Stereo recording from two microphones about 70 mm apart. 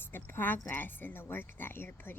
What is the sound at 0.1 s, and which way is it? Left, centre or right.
A woman's voice, left.